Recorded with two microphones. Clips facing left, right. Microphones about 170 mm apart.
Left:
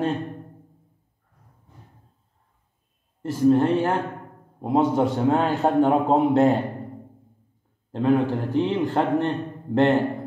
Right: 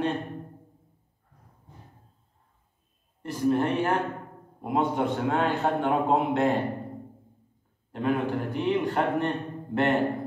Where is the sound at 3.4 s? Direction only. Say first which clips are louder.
Left 6 dB; 35° left (ahead or behind).